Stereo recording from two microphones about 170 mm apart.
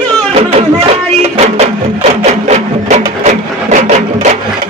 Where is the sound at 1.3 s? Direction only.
35° right (ahead or behind).